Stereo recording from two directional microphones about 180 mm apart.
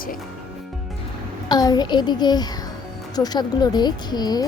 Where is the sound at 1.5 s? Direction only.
20° left (ahead or behind).